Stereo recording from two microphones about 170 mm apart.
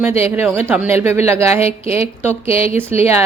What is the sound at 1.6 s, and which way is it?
Speech, 35° left (ahead or behind).